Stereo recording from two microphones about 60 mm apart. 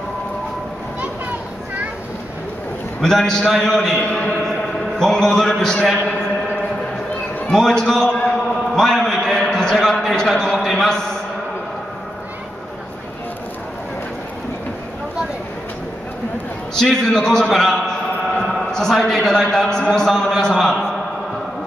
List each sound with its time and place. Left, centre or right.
3.0 s a man's voice: centre
4.1 s a man's voice: centre
4.9 s a man's voice: centre
7.5 s a man's voice: centre
8.7 s a sound: centre
16.7 s a man's voice: centre